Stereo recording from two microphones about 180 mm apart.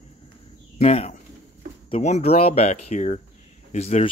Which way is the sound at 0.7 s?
35° left (ahead or behind).